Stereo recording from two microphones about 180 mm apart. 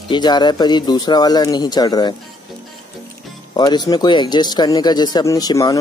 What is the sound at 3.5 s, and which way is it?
Speech, 25° left (ahead or behind).